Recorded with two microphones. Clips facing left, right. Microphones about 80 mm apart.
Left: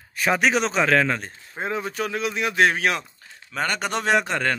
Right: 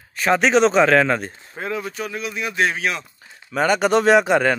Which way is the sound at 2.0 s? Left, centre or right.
Left.